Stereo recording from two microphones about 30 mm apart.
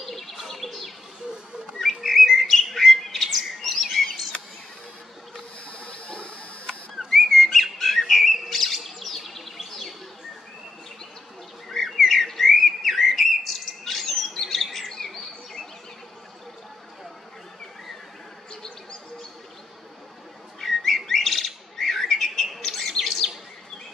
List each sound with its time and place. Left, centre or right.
0.0 s bird: centre
4.0 s chirp: centre
5.7 s a sound: left
7.2 s bird: centre
11.7 s bird: centre
18.5 s bee: left
20.6 s bird: centre